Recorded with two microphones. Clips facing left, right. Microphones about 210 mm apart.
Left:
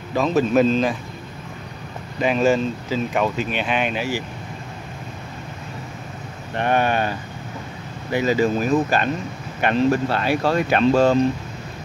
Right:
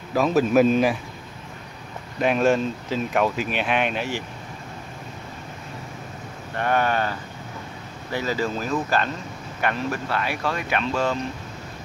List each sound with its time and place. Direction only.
0.1 s speech: 5° right (ahead or behind)
2.1 s speech: centre (ahead or behind)
6.5 s speech: 20° left (ahead or behind)